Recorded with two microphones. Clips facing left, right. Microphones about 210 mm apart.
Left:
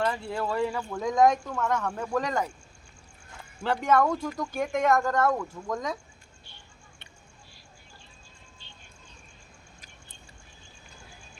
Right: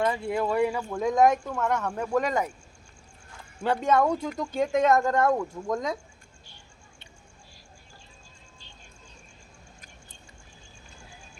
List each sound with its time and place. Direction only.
0.0 s speech: 15° right (ahead or behind)
3.6 s speech: 15° right (ahead or behind)